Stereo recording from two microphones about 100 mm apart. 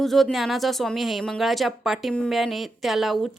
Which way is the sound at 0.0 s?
Centre (ahead or behind).